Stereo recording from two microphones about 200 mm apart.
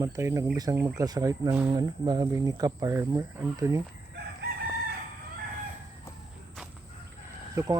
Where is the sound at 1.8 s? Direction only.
20° right (ahead or behind).